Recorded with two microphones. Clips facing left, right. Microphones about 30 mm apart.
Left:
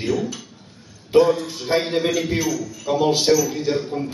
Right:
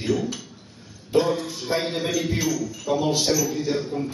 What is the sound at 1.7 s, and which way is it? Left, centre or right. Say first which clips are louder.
Speech: left 5 dB; left.